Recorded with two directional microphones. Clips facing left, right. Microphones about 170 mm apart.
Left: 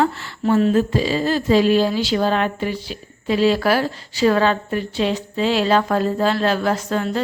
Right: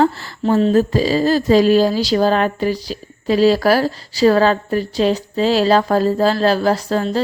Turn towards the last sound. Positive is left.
turn(degrees=-35)  # may be behind; listen again after turning